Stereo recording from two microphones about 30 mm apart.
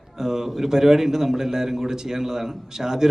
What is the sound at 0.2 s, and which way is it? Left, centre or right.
A man's voice, centre.